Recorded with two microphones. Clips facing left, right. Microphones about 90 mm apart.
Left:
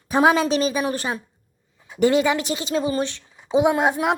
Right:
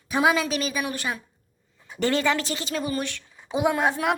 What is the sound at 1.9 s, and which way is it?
A woman's voice, 15° left (ahead or behind).